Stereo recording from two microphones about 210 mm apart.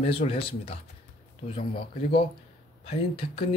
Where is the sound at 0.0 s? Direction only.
30° left (ahead or behind).